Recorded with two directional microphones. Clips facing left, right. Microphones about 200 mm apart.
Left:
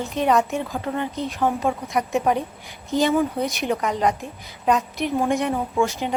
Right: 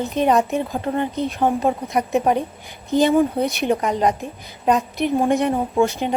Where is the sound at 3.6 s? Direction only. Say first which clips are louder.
Right 2 dB; 30° right (ahead or behind).